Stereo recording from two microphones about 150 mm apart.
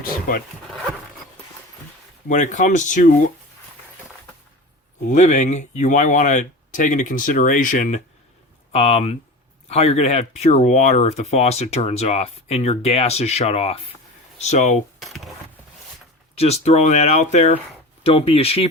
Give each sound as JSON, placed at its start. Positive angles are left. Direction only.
{"t": 0.0, "sound": "speech", "side_deg": 70}
{"t": 2.2, "sound": "speech", "side_deg": 55}
{"t": 5.1, "sound": "speech", "side_deg": 50}
{"t": 8.7, "sound": "speech", "side_deg": 40}
{"t": 14.9, "sound": "coin", "side_deg": 0}
{"t": 16.4, "sound": "speech", "side_deg": 45}